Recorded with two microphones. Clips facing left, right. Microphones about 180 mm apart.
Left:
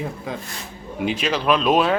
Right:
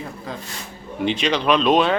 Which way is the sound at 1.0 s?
5° left (ahead or behind).